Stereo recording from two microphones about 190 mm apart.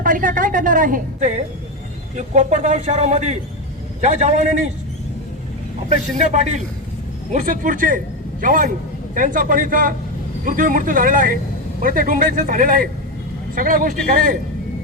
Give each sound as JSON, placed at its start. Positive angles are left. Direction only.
{"t": 0.0, "sound": "a woman's voice", "side_deg": -45}
{"t": 6.1, "sound": "a man's voice", "side_deg": -40}